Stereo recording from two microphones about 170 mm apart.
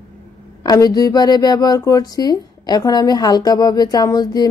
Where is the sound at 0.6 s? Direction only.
25° left (ahead or behind).